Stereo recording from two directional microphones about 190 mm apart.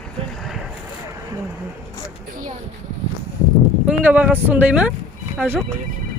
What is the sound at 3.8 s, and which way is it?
Speech, 10° right (ahead or behind).